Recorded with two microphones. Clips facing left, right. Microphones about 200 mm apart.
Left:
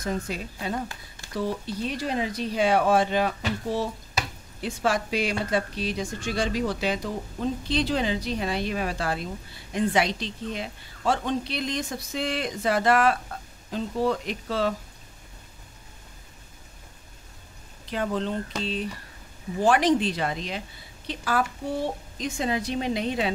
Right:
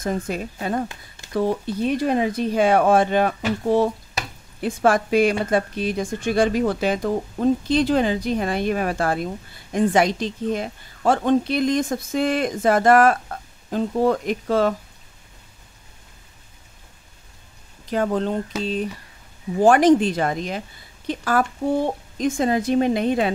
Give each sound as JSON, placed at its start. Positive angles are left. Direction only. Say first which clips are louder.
{"t": 0.0, "sound": "speech", "louder": "right 5 dB", "side_deg": -50}
{"t": 17.8, "sound": "speech", "louder": "right 6 dB", "side_deg": -45}